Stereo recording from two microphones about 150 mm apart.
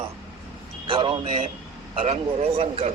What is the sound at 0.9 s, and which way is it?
Speech, 35° right (ahead or behind).